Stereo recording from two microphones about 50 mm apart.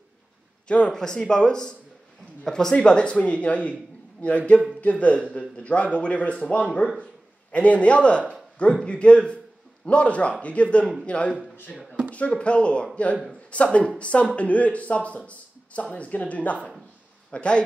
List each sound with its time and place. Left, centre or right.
0.7 s speech: left
0.9 s speech: centre
2.7 s speech: left